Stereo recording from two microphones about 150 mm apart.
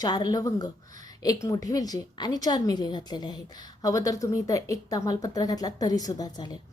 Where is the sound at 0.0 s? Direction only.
25° left (ahead or behind).